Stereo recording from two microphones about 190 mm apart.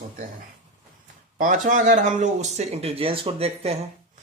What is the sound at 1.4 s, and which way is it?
A man's voice, 45° right (ahead or behind).